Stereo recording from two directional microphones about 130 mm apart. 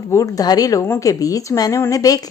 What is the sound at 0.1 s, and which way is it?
A woman's voice, 25° left (ahead or behind).